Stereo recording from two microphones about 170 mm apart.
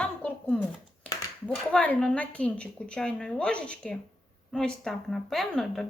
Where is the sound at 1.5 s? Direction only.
10° left (ahead or behind).